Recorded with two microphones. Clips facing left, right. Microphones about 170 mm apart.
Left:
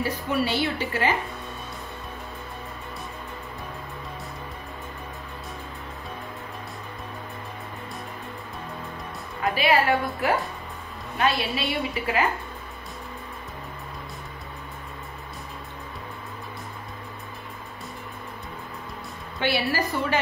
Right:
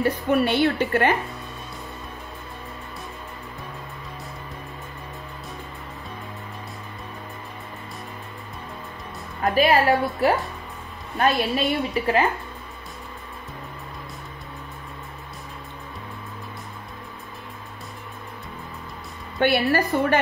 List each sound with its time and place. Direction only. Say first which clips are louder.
0.0 s a woman's voice: right 5 dB; 55° right (ahead or behind)
9.4 s a woman's voice: right 3 dB; 40° right (ahead or behind)
19.4 s a woman's voice: right 5 dB; 55° right (ahead or behind)